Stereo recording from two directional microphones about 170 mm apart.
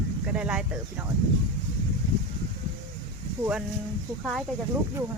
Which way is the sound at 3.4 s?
5° right (ahead or behind).